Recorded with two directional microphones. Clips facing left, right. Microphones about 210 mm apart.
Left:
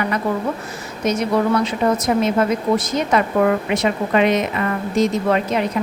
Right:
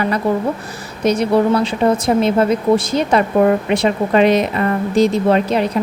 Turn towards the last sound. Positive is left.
turn(degrees=-30)  # may be behind; listen again after turning